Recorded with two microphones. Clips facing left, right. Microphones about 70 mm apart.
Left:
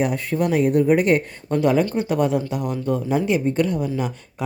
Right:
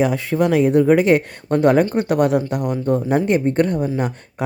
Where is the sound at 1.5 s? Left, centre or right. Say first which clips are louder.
Right 4 dB; right.